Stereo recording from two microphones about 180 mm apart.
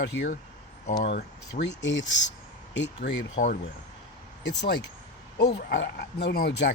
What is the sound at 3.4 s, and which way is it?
Speech, 45° left (ahead or behind).